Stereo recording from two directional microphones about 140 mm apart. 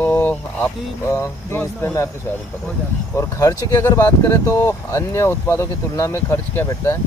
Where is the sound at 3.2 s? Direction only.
20° left (ahead or behind).